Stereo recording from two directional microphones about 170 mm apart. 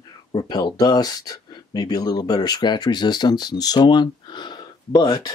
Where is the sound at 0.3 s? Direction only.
25° left (ahead or behind).